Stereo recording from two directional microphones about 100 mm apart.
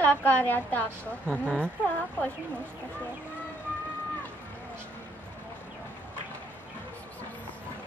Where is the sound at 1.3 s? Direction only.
15° right (ahead or behind).